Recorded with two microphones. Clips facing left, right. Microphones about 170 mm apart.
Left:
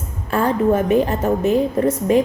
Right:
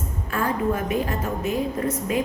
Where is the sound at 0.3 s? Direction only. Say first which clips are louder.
Left 7 dB; 35° left (ahead or behind).